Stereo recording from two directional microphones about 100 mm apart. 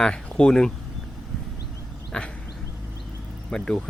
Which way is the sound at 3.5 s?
10° left (ahead or behind).